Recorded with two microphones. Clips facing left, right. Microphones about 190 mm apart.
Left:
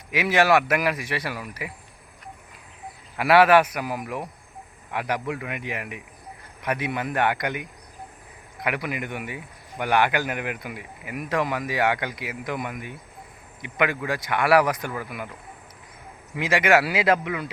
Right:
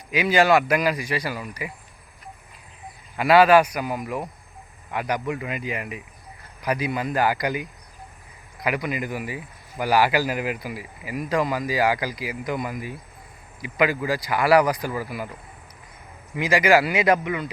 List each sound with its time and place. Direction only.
0.1 s speech: 5° left (ahead or behind)
3.2 s speech: 5° left (ahead or behind)
8.6 s speech: centre (ahead or behind)
16.3 s speech: centre (ahead or behind)